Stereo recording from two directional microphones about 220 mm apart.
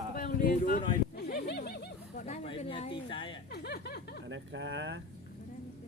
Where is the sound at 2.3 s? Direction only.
30° left (ahead or behind).